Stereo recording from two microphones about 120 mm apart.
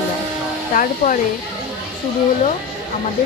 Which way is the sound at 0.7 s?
90° left.